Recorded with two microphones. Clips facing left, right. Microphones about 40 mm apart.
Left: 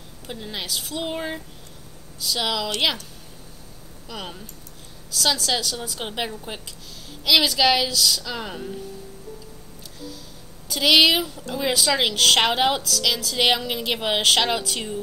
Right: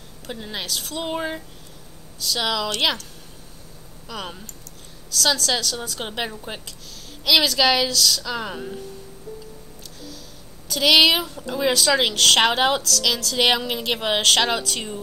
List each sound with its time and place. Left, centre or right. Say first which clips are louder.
0.3 s a woman's voice: right 1 dB; centre
4.1 s a woman's voice: right 2 dB; centre
10.7 s a woman's voice: right 1 dB; centre